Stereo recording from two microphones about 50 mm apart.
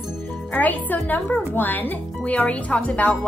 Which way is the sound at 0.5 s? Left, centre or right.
Left.